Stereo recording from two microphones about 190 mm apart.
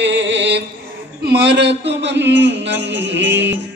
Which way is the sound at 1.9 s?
65° right (ahead or behind).